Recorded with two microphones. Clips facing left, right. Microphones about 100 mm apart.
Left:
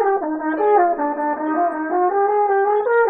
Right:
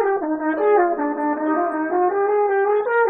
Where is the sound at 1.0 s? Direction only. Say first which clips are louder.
Left 1 dB; 10° left (ahead or behind).